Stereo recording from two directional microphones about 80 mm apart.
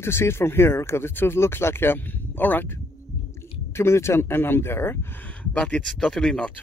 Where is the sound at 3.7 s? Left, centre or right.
Left.